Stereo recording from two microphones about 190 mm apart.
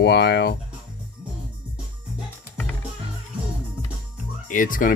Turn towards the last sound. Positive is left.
turn(degrees=45)  # may be behind; listen again after turning